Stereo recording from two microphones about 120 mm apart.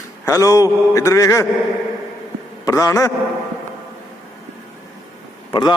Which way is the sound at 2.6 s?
25° left (ahead or behind).